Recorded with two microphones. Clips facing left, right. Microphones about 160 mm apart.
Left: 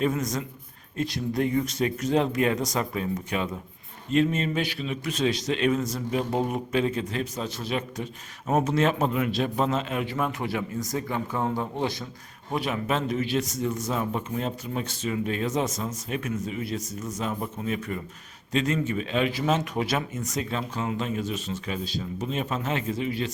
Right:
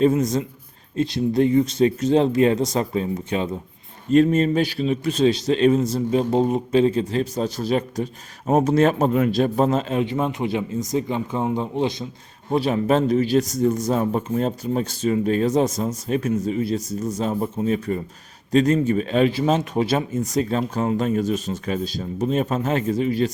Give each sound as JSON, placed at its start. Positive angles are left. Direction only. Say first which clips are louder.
{"t": 0.0, "sound": "a man's voice", "louder": "right 8 dB", "side_deg": -30}
{"t": 4.1, "sound": "a man's voice", "louder": "right 7 dB", "side_deg": -40}
{"t": 12.5, "sound": "a man's voice", "louder": "right 8 dB", "side_deg": -30}